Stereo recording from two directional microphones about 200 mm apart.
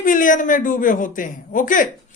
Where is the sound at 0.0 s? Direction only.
40° left (ahead or behind).